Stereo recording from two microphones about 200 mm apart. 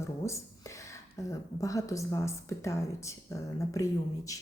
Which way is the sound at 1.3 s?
15° left (ahead or behind).